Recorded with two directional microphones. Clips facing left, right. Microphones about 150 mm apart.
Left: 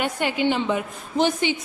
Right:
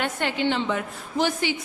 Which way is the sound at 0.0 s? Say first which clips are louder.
Left 2 dB; 10° left (ahead or behind).